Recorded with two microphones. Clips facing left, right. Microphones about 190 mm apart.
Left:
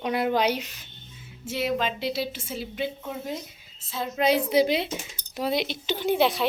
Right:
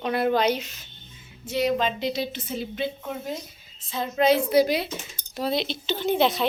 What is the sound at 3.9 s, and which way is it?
Speech, 5° left (ahead or behind).